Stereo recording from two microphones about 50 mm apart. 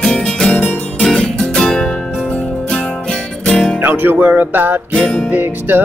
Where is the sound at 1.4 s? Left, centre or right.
Centre.